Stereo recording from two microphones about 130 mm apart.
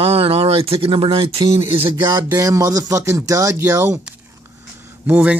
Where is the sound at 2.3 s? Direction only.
25° right (ahead or behind).